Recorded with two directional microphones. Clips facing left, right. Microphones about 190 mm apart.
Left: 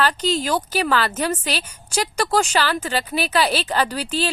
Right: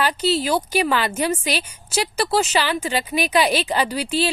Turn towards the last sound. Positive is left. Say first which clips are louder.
# right 1 dB
turn(degrees=-10)  # may be behind; listen again after turning